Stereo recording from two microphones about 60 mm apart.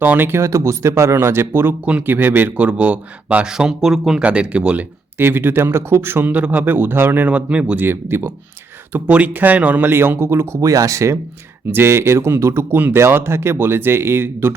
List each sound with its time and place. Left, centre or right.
0.0 s speech: right
1.8 s speech: right
2.6 s speech: right
3.4 s speech: centre
4.2 s speech: centre
5.1 s speech: right
6.3 s speech: right
7.3 s speech: right
7.8 s speech: right
8.9 s speech: right
9.9 s speech: right
10.6 s speech: right
11.7 s speech: right
12.7 s speech: right